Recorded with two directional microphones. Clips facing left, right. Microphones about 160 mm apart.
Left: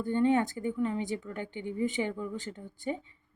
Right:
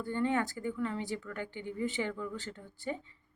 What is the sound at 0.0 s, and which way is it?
A woman's voice, 20° left (ahead or behind).